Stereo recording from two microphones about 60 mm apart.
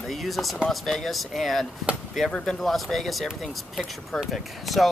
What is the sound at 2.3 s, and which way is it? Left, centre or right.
Speech, centre.